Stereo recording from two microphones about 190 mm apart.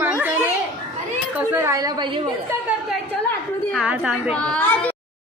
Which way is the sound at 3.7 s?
5° right (ahead or behind).